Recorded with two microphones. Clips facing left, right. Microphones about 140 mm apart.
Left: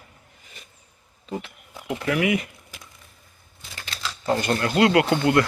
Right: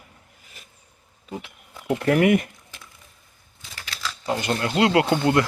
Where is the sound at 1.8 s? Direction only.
45° right (ahead or behind).